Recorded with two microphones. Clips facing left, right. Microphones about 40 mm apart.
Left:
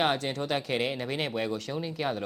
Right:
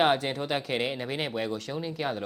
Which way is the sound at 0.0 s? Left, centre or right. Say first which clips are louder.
Right 3 dB; centre.